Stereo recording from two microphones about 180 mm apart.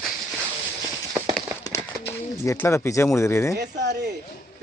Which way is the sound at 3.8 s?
70° right (ahead or behind).